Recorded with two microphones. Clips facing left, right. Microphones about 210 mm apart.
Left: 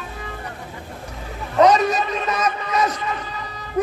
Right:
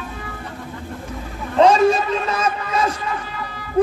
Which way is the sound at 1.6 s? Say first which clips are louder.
Right 2 dB; 30° right (ahead or behind).